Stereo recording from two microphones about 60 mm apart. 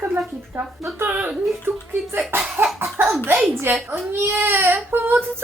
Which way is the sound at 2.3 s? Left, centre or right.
Right.